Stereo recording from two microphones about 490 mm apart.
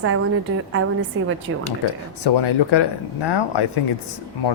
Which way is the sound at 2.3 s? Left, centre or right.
Left.